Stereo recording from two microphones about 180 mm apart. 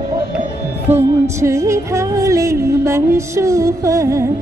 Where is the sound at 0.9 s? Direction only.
15° right (ahead or behind).